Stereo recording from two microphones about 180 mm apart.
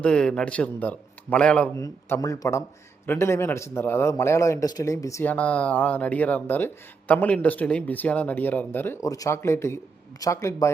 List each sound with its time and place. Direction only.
0.0 s a man's voice: 5° left (ahead or behind)